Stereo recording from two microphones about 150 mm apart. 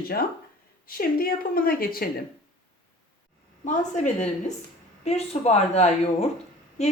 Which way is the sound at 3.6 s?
55° left (ahead or behind).